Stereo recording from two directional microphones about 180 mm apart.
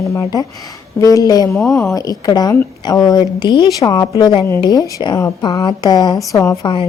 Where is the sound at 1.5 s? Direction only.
5° left (ahead or behind).